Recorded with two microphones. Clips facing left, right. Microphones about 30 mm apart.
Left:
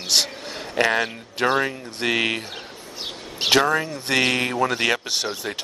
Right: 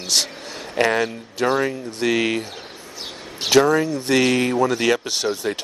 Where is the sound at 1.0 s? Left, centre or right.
Left.